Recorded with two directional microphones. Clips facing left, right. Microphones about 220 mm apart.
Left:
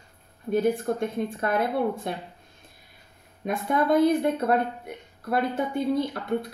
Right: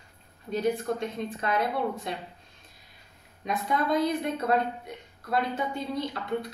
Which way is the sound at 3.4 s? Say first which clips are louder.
Left 4 dB; 55° left (ahead or behind).